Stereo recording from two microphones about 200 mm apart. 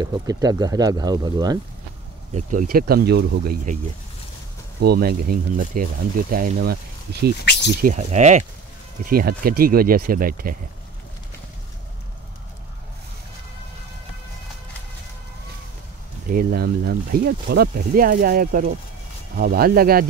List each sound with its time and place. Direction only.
0.0 s speech: 20° right (ahead or behind)
2.3 s speech: 40° right (ahead or behind)
4.7 s speech: 50° right (ahead or behind)
7.8 s speech: 35° right (ahead or behind)
9.0 s speech: 45° right (ahead or behind)
16.3 s speech: 50° right (ahead or behind)